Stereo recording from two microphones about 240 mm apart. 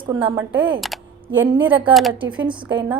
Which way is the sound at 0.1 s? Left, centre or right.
Centre.